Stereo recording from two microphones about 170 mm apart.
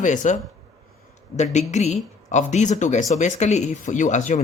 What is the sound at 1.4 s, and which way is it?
Speech, 40° left (ahead or behind).